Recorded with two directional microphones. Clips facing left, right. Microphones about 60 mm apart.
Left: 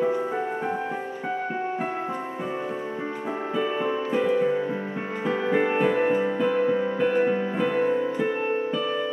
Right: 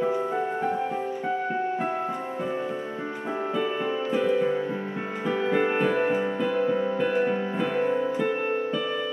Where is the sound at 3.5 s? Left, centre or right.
Centre.